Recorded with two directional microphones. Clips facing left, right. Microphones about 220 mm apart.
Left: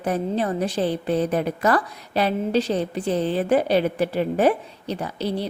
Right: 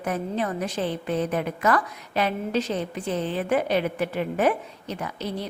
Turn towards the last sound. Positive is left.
turn(degrees=30)  # may be behind; listen again after turning